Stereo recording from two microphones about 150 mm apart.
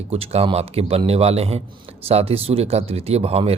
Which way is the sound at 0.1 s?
40° right (ahead or behind).